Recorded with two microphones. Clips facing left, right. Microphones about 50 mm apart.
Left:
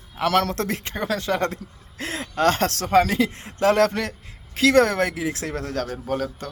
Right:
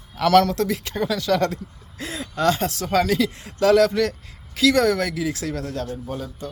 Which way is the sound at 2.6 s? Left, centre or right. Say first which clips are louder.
Left 2 dB; left.